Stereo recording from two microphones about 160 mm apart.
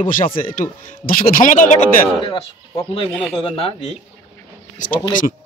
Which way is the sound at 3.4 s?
35° left (ahead or behind).